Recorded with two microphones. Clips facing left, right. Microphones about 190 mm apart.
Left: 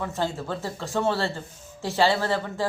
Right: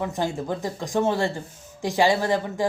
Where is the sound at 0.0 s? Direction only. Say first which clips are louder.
Right 2 dB; 15° right (ahead or behind).